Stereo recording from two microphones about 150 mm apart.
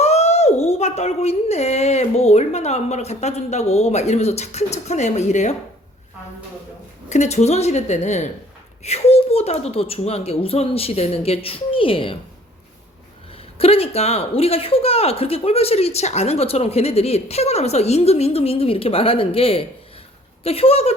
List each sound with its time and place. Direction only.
0.0 s speech: 45° left (ahead or behind)
7.1 s speech: 50° left (ahead or behind)
13.3 s speech: 40° left (ahead or behind)